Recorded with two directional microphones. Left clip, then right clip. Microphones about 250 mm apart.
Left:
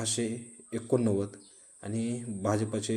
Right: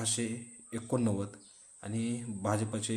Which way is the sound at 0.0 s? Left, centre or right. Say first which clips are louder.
Left 3 dB; centre.